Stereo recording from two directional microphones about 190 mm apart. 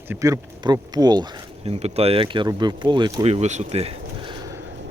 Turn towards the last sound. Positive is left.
turn(degrees=-25)  # may be behind; listen again after turning